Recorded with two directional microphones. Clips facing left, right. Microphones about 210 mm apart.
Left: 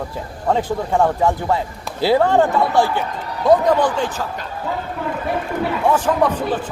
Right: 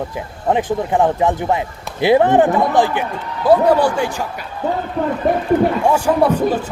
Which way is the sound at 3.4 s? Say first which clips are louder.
Right 2 dB; 5° right (ahead or behind).